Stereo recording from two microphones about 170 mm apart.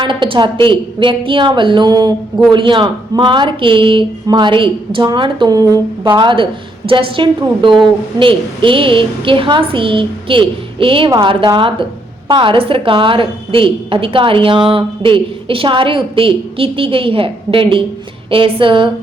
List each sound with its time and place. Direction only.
0.0 s a woman's voice: 30° right (ahead or behind)